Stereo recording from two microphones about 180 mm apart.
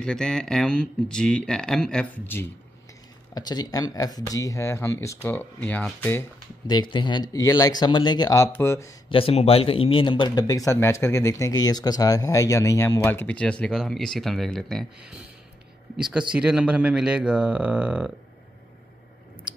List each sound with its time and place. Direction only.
0.0 s speech: 5° left (ahead or behind)
3.3 s speech: 20° left (ahead or behind)
6.7 s speech: 25° left (ahead or behind)
9.1 s speech: 35° left (ahead or behind); by 18.1 s 5° right (ahead or behind)